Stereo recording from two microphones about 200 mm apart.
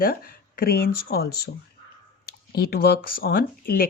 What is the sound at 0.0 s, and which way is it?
Speech, 45° left (ahead or behind).